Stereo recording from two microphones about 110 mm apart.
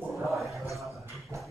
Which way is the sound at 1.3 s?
25° right (ahead or behind).